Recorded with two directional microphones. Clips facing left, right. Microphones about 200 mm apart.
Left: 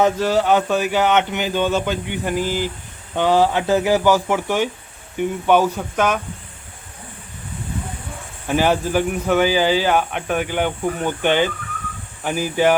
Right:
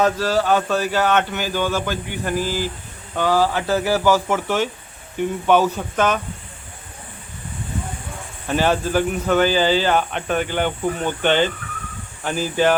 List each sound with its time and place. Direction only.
0.0 s speech: 20° left (ahead or behind)
8.4 s speech: 15° left (ahead or behind)